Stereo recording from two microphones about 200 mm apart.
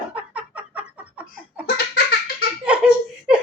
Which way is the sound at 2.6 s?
5° right (ahead or behind).